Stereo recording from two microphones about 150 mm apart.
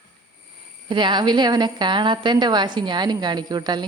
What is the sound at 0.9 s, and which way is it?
Speech, 30° right (ahead or behind).